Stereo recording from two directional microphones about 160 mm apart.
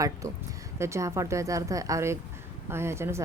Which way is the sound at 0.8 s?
20° right (ahead or behind).